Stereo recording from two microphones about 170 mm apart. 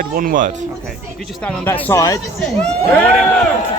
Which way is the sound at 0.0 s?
55° right (ahead or behind).